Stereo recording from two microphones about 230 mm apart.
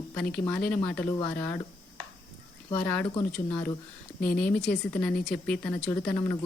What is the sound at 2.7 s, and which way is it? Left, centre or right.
Speech, centre.